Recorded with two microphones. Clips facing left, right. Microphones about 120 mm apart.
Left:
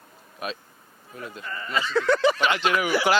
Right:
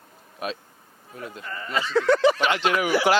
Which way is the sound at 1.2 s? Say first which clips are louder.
Even; 40° right (ahead or behind).